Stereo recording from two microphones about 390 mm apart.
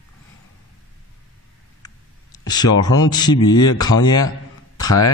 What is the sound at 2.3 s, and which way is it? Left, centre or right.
A man's voice, centre.